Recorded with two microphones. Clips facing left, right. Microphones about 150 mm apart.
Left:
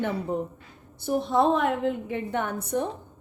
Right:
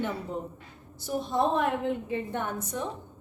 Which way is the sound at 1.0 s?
60° left (ahead or behind).